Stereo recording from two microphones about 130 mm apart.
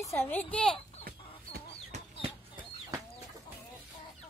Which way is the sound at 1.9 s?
65° right (ahead or behind).